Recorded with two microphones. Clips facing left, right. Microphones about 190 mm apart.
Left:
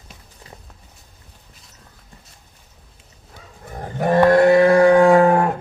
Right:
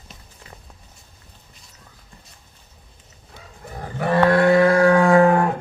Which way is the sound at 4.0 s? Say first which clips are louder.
Left 3 dB; 40° left (ahead or behind).